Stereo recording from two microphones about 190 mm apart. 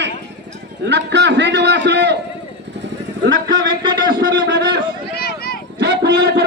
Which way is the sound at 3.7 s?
25° right (ahead or behind).